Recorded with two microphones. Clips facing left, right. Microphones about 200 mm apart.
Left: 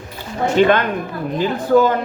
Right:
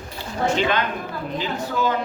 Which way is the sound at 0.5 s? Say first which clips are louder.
Left 13 dB; 50° left (ahead or behind).